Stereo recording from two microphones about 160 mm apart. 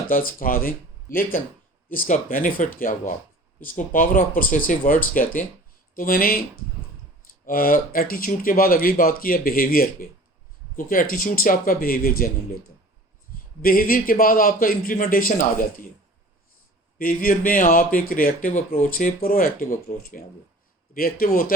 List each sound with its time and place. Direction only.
0.1 s speech: 60° left (ahead or behind)
7.4 s speech: 60° left (ahead or behind)
17.0 s speech: 60° left (ahead or behind)
20.9 s speech: 65° left (ahead or behind)